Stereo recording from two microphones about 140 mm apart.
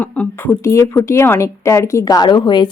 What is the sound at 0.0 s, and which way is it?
Speech, 10° left (ahead or behind).